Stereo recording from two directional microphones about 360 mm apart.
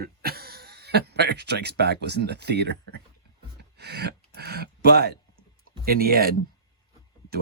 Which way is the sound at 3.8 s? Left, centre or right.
Right.